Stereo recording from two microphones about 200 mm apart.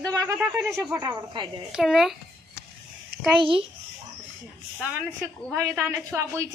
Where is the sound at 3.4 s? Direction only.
25° right (ahead or behind).